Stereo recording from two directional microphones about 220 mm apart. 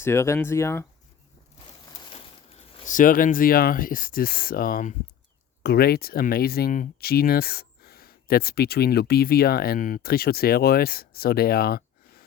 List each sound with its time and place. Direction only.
0.0 s speech: 10° left (ahead or behind)
2.7 s speech: 35° left (ahead or behind)